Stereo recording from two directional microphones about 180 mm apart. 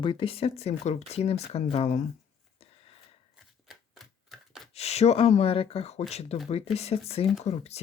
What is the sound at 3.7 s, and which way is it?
Typewriter, centre (ahead or behind).